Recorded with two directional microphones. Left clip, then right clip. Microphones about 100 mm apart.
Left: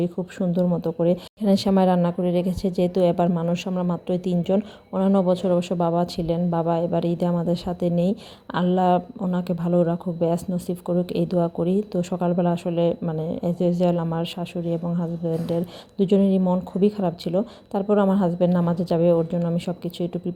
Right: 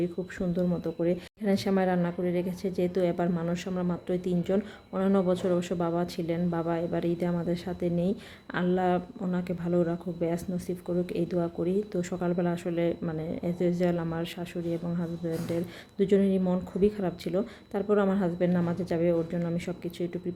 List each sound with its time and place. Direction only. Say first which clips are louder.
0.0 s speech: left 5 dB; 40° left (ahead or behind)
0.6 s speech: left 8 dB; 10° left (ahead or behind)
1.0 s speech: left 7 dB; 50° left (ahead or behind)
3.4 s speech: left 6 dB; 30° left (ahead or behind)
16.0 s speech: left 4 dB; 30° left (ahead or behind)